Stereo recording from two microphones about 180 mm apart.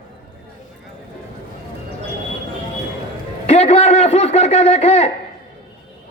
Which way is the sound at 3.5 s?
35° left (ahead or behind).